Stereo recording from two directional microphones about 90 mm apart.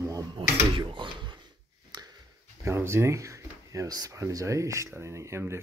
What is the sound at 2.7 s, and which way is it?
Speech, 30° right (ahead or behind).